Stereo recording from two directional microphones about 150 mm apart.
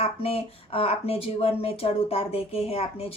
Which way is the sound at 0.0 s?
40° left (ahead or behind).